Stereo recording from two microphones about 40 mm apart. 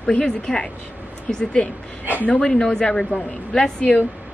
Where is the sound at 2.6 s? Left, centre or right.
Left.